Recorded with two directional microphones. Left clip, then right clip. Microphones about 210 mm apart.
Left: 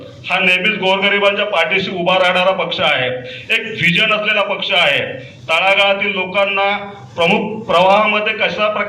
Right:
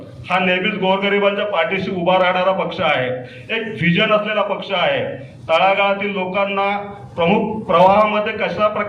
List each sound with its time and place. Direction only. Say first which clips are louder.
0.3 s a man's voice: left 4 dB; 55° right (ahead or behind)